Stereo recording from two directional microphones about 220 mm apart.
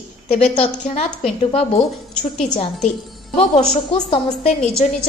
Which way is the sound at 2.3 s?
30° left (ahead or behind).